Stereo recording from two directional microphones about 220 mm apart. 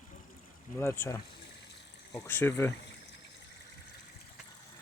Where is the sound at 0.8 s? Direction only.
10° left (ahead or behind).